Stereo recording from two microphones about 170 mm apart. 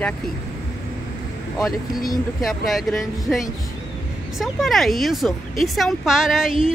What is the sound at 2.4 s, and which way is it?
Speech, centre (ahead or behind).